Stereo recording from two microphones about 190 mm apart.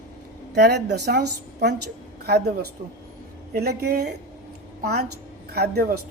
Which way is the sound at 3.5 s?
55° right (ahead or behind).